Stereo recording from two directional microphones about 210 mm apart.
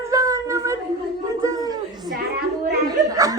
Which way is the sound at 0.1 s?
15° right (ahead or behind).